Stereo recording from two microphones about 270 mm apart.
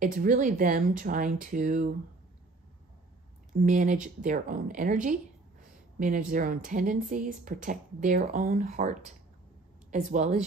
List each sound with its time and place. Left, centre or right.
0.0 s speech: right
3.6 s speech: right